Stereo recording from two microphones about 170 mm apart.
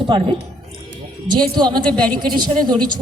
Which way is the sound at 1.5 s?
25° right (ahead or behind).